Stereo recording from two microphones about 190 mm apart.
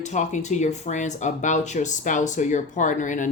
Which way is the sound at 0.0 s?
40° left (ahead or behind).